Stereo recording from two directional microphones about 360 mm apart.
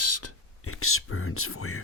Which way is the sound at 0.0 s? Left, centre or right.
Left.